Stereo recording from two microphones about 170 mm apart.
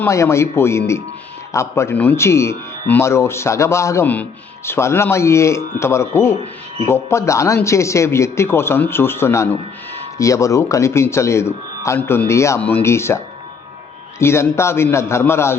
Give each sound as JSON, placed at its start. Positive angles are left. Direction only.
{"t": 0.0, "sound": "a man's voice", "side_deg": 15}
{"t": 14.2, "sound": "a man's voice", "side_deg": 15}